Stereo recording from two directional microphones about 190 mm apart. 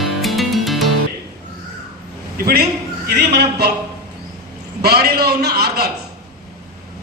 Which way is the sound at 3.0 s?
60° right (ahead or behind).